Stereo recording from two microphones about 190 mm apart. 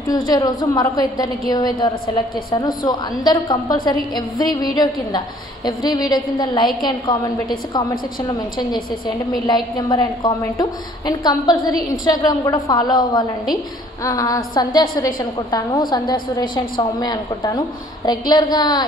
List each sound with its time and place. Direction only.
0.1 s a woman's voice: 20° left (ahead or behind)
9.5 s a woman's voice: 20° left (ahead or behind)